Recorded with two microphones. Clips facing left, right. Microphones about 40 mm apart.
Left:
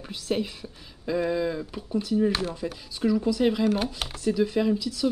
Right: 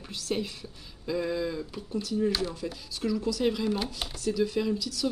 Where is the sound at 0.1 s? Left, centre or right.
Centre.